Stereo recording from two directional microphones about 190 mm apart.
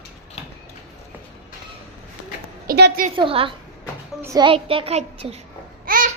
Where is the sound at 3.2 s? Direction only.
30° right (ahead or behind).